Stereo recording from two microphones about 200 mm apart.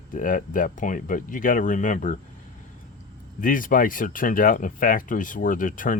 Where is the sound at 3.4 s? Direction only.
45° left (ahead or behind).